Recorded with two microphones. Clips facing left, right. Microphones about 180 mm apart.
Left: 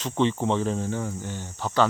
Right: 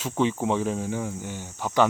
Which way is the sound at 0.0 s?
10° right (ahead or behind).